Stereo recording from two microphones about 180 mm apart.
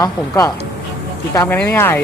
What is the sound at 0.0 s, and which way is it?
Speech, 15° left (ahead or behind).